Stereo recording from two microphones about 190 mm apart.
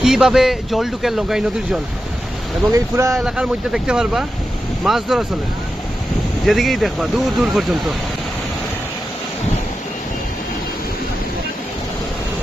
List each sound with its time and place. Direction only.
0.0 s speech: centre (ahead or behind)
2.7 s speech: 15° right (ahead or behind)
3.2 s speech: 5° right (ahead or behind)
6.4 s speech: centre (ahead or behind)